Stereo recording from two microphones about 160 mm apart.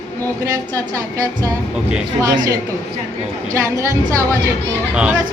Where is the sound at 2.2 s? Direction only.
25° right (ahead or behind).